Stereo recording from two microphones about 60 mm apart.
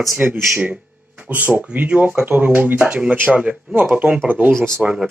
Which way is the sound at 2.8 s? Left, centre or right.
Centre.